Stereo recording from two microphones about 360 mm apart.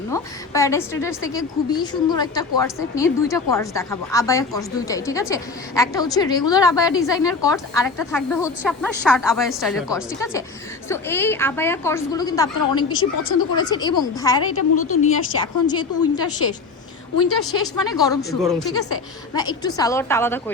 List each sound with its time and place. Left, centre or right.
0.1 s a woman's voice: centre
14.5 s a woman's voice: left
15.0 s a woman's voice: centre
17.6 s a woman's voice: centre